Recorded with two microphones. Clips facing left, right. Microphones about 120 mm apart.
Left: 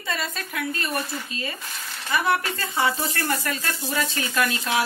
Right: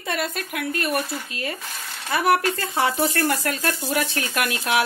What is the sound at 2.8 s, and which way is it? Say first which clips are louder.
Speech: right 1 dB; 70° right (ahead or behind).